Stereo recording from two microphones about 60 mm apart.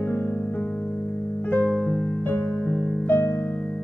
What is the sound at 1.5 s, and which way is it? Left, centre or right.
Music, left.